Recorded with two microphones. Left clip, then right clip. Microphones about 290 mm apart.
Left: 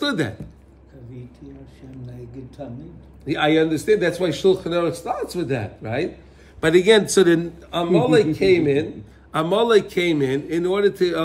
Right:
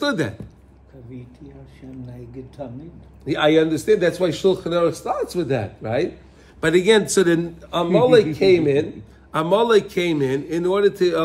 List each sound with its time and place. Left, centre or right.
0.0 s a man's voice: centre
1.8 s a sound: right
3.3 s a man's voice: centre